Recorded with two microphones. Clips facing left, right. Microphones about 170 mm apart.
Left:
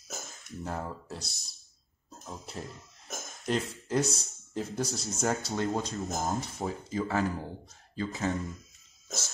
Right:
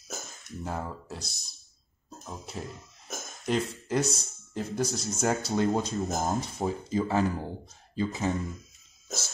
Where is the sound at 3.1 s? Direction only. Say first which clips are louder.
Right 2 dB; centre (ahead or behind).